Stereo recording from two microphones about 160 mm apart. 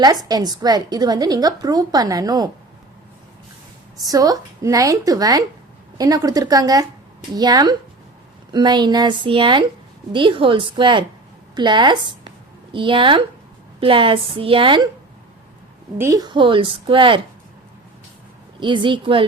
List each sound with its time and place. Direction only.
0.0 s a woman's voice: 25° right (ahead or behind)
3.9 s a woman's voice: 25° right (ahead or behind)
16.0 s a woman's voice: 20° right (ahead or behind)
18.6 s a woman's voice: 30° right (ahead or behind)